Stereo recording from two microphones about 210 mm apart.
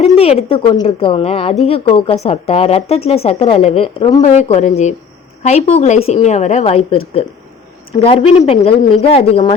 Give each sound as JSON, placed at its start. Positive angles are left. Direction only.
{"t": 0.0, "sound": "speech", "side_deg": 30}
{"t": 8.4, "sound": "speech", "side_deg": 30}